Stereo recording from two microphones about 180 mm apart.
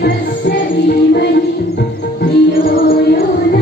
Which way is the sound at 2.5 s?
55° left (ahead or behind).